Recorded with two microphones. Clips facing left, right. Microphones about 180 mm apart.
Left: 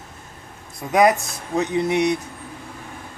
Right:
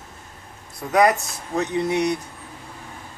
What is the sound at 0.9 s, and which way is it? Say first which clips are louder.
Speech: left 1 dB; 15° left (ahead or behind).